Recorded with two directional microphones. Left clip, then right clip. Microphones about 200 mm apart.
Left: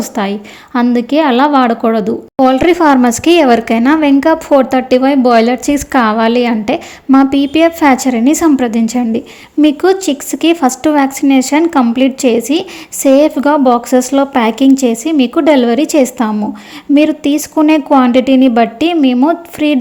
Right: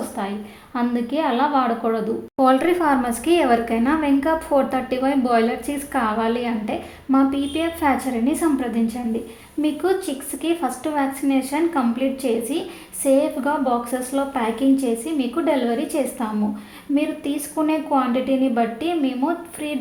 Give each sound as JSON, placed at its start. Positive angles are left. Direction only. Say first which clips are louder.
{"t": 0.2, "sound": "a woman's voice", "louder": "left 11 dB", "side_deg": 40}